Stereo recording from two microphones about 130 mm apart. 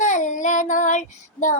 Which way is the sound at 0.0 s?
70° left (ahead or behind).